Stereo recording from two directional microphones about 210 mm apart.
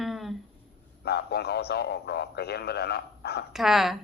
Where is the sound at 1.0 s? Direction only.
50° left (ahead or behind).